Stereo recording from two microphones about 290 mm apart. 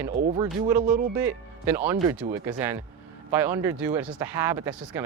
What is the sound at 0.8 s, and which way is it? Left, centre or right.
Speech, right.